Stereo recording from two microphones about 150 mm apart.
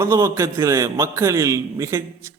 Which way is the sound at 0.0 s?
20° right (ahead or behind).